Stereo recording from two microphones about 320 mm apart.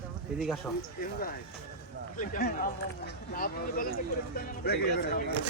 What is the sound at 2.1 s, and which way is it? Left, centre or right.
Speech, left.